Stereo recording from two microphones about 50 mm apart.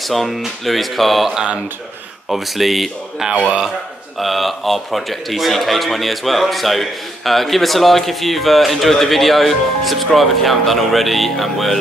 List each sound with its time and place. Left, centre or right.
0.0 s a man's voice: centre
1.3 s speech: centre
2.2 s a man's voice: centre